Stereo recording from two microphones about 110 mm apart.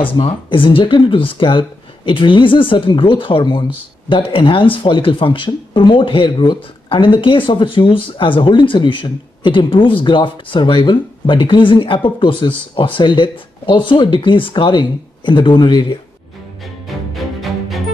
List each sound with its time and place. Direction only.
0.0 s speech: 55° left (ahead or behind)
16.8 s music: centre (ahead or behind)